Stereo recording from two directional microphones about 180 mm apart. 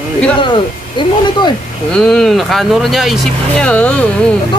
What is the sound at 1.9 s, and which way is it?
Speech, 5° left (ahead or behind).